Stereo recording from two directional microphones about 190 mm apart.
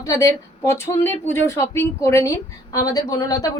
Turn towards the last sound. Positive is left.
turn(degrees=20)  # may be behind; listen again after turning